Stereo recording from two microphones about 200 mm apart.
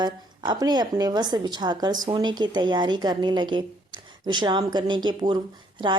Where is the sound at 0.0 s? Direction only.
20° right (ahead or behind).